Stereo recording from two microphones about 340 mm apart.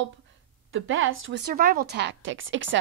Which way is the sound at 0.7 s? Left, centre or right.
Right.